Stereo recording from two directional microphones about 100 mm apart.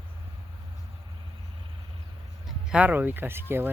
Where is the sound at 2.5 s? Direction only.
10° right (ahead or behind).